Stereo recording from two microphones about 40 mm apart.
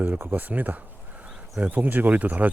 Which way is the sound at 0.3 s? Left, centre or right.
Right.